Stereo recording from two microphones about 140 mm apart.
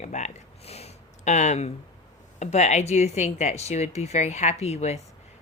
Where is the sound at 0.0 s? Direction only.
55° left (ahead or behind).